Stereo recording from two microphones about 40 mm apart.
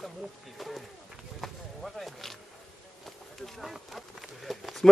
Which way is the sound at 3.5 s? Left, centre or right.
Centre.